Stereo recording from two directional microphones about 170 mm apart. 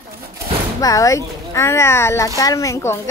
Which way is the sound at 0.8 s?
20° left (ahead or behind).